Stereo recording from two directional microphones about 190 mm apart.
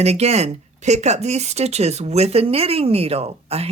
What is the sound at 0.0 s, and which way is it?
Speech, 35° right (ahead or behind).